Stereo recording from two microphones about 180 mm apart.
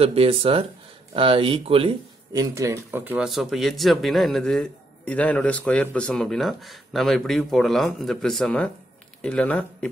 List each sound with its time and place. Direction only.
0.0 s speech: 30° right (ahead or behind)
2.5 s speech: 15° right (ahead or behind); by 9.8 s 5° left (ahead or behind)